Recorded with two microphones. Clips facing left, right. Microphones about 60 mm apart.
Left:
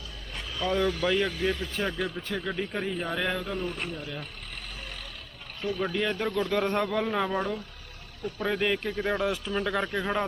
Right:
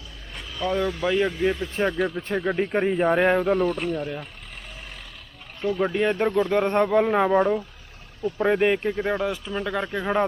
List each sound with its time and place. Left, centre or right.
0.3 s speech: centre
2.4 s speech: right
3.7 s speech: centre
4.0 s speech: centre
5.6 s speech: right
9.0 s speech: centre